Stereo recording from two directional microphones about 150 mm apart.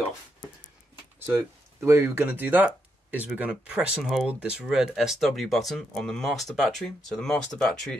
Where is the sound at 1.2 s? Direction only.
15° right (ahead or behind).